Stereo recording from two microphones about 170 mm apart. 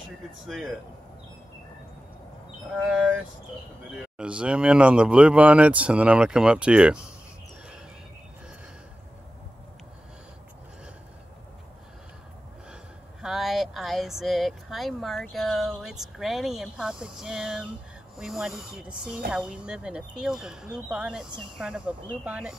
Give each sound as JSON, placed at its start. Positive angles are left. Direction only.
{"t": 0.5, "sound": "speech", "side_deg": -5}
{"t": 2.8, "sound": "speech", "side_deg": -5}
{"t": 13.2, "sound": "speech", "side_deg": 0}